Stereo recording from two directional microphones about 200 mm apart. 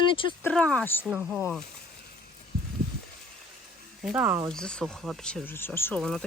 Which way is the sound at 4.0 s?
5° right (ahead or behind).